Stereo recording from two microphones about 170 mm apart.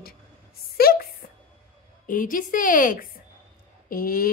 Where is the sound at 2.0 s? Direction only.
50° left (ahead or behind).